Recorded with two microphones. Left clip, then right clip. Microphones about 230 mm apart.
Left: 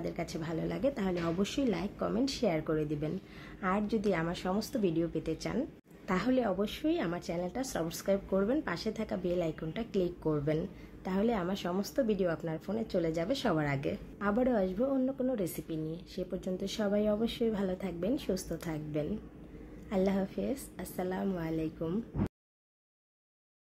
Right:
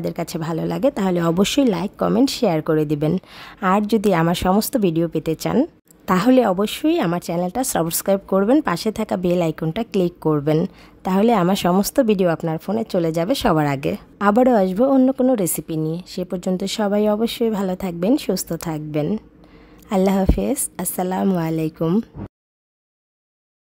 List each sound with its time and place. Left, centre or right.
0.0 s speech: right